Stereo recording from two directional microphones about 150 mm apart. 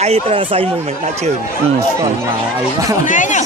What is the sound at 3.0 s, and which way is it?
Speech, 55° left (ahead or behind).